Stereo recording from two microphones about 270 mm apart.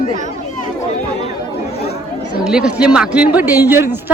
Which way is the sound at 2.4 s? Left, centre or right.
Centre.